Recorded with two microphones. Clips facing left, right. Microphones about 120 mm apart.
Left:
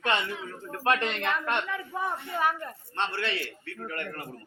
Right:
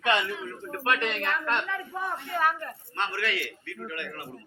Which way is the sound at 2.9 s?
30° left (ahead or behind).